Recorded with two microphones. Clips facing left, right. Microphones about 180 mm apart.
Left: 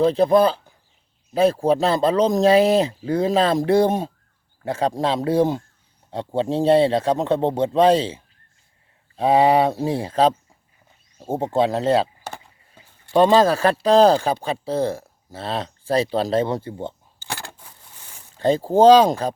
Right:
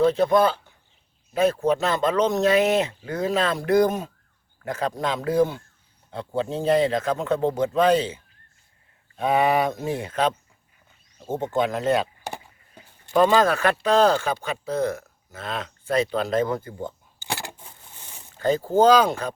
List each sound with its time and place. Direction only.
0.0 s speech: 35° left (ahead or behind)
12.2 s chop: 15° right (ahead or behind)
13.1 s speech: 30° left (ahead or behind)
17.2 s a sound: 15° right (ahead or behind)
18.3 s speech: 30° left (ahead or behind)